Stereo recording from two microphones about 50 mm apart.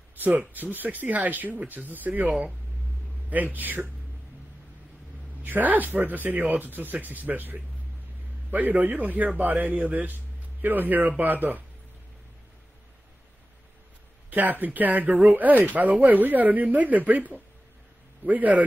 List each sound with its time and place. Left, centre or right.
0.1 s a man's voice: right
3.5 s a man's voice: right
5.4 s a man's voice: right
14.3 s a man's voice: right